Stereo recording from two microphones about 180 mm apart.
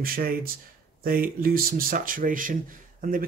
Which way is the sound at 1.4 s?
55° right (ahead or behind).